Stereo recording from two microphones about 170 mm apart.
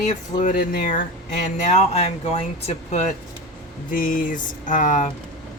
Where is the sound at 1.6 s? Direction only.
40° left (ahead or behind).